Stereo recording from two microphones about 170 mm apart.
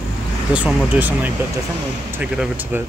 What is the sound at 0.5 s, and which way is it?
Speech, 10° right (ahead or behind).